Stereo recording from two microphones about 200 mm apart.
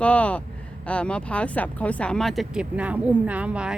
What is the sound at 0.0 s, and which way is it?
Speech, 5° left (ahead or behind).